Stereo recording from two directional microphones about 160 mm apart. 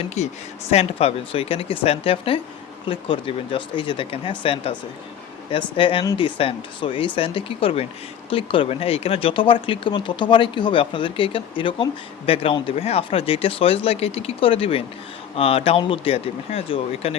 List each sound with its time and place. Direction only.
0.0 s speech: 45° left (ahead or behind)